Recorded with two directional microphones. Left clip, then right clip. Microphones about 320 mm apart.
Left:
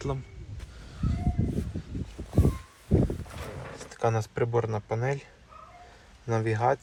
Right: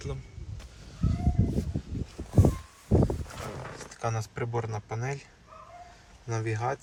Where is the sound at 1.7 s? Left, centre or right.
Centre.